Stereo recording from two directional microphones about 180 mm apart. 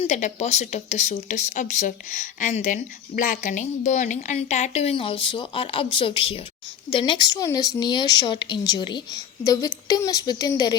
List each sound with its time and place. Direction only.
0.0 s a woman's voice: 40° left (ahead or behind); by 10.8 s 20° left (ahead or behind)